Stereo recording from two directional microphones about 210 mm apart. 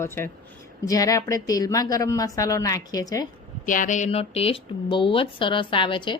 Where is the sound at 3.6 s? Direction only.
40° left (ahead or behind).